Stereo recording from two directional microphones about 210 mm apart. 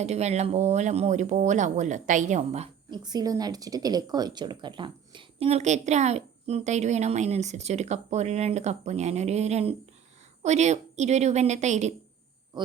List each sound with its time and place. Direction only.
0.0 s speech: 30° right (ahead or behind)
3.0 s speech: 20° right (ahead or behind)